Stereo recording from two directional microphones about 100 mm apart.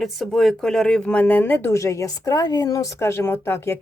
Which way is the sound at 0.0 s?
Centre (ahead or behind).